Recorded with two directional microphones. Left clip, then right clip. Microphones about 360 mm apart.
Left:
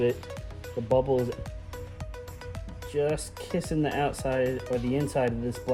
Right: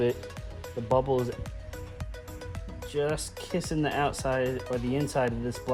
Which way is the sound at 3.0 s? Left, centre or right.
Centre.